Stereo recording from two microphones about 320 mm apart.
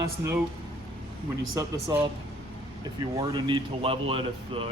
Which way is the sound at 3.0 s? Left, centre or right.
Centre.